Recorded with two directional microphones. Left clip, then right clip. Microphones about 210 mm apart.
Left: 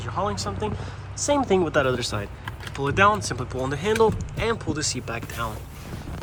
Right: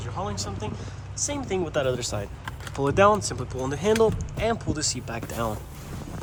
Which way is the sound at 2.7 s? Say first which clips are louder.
Even; 15° right (ahead or behind).